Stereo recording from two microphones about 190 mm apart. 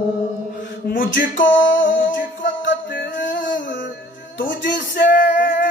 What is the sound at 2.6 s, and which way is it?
Music, 75° left (ahead or behind).